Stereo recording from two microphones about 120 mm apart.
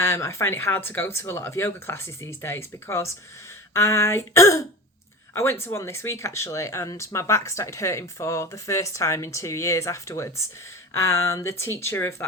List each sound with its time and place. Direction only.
0.0 s speech: 20° left (ahead or behind)